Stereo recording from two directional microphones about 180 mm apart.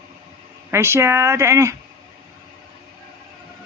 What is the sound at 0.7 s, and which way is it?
Speech, 15° right (ahead or behind).